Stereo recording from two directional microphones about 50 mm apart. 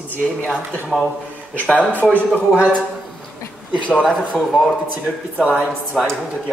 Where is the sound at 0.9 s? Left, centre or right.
Centre.